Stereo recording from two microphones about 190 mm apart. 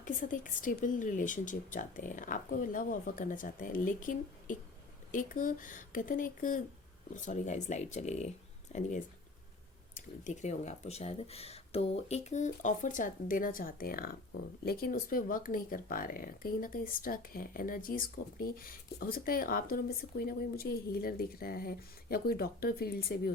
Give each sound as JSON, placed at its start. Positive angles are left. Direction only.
{"t": 0.0, "sound": "speech", "side_deg": 45}
{"t": 10.2, "sound": "speech", "side_deg": 40}